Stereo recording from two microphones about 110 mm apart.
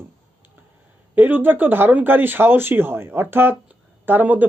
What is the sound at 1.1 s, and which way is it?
Speech, 15° right (ahead or behind).